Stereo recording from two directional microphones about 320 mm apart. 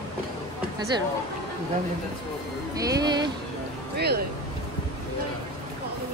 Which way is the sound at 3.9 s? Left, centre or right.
Right.